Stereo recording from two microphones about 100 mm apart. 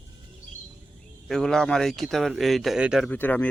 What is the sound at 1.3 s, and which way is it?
A man's voice, 5° left (ahead or behind).